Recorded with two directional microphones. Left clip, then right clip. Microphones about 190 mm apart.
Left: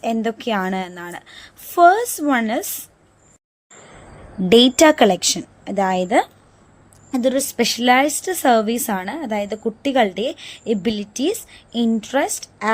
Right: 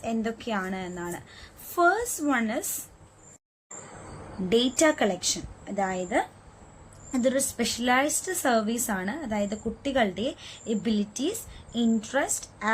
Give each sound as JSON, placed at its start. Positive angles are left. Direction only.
{"t": 0.0, "sound": "a woman's voice", "side_deg": 40}
{"t": 4.4, "sound": "a woman's voice", "side_deg": 45}
{"t": 7.1, "sound": "a woman's voice", "side_deg": 35}